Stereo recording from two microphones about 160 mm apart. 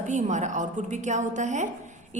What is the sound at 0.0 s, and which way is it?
A woman's voice, 50° right (ahead or behind).